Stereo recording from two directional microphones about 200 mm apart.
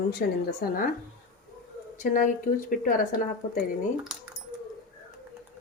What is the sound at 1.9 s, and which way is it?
A woman's voice, 40° left (ahead or behind).